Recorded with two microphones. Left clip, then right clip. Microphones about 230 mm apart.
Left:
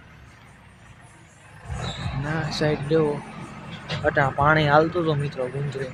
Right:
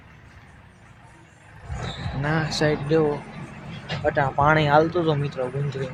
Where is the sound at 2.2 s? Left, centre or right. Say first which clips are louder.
Right 3 dB; right; by 3.1 s centre.